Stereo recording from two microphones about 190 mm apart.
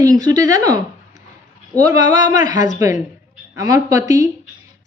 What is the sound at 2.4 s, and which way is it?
Speech, 40° left (ahead or behind).